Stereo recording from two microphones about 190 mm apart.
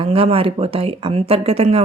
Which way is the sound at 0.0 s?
30° right (ahead or behind).